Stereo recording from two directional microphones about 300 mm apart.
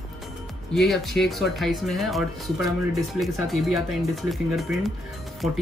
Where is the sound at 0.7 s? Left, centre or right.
Centre.